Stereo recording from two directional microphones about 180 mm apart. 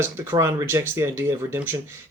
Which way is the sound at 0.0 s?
15° right (ahead or behind).